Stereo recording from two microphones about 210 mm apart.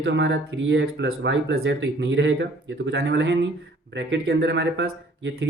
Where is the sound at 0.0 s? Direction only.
55° right (ahead or behind).